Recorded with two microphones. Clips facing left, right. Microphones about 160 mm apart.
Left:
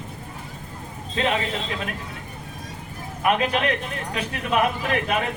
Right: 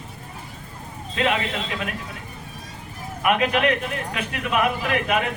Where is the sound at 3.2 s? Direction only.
35° left (ahead or behind).